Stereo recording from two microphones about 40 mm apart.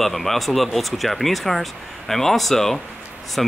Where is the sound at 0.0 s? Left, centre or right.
Centre.